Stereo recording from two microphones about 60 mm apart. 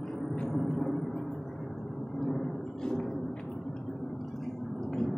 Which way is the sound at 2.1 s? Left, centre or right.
Centre.